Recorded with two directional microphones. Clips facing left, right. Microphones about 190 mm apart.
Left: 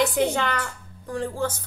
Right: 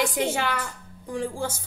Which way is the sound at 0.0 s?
10° right (ahead or behind).